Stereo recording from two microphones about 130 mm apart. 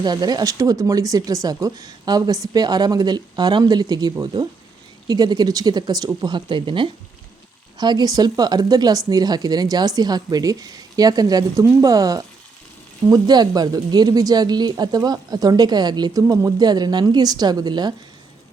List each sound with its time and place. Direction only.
0.0 s speech: 30° right (ahead or behind)